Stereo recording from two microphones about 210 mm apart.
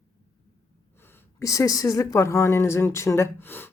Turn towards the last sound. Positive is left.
turn(degrees=10)  # may be behind; listen again after turning